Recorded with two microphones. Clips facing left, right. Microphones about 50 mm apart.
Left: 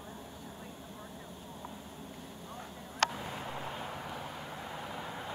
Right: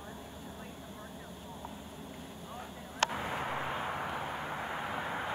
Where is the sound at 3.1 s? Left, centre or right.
Right.